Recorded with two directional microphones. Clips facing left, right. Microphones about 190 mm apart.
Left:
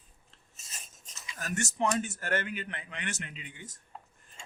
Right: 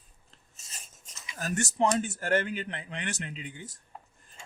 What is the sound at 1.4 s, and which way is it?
Speech, 35° right (ahead or behind).